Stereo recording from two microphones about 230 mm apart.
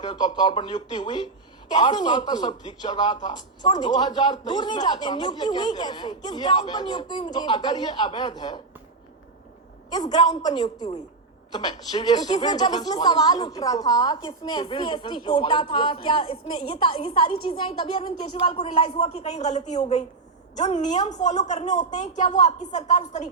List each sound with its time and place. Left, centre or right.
0.0 s speech: left
9.9 s a woman's voice: centre